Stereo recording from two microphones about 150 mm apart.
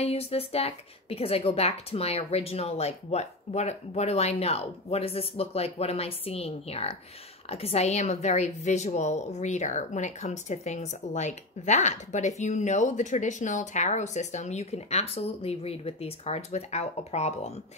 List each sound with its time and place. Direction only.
0.0 s a woman's voice: 40° left (ahead or behind)